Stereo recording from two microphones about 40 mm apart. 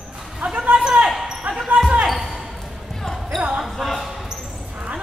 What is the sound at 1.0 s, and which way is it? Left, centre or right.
Basketball bounce, centre.